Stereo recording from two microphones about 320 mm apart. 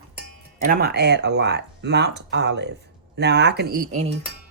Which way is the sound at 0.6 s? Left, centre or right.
Right.